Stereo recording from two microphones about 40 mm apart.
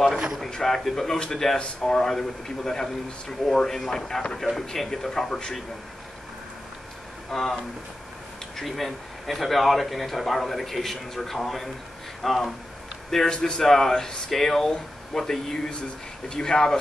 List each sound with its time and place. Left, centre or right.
0.5 s speech: centre
7.2 s a man's voice: centre
13.3 s a man's voice: centre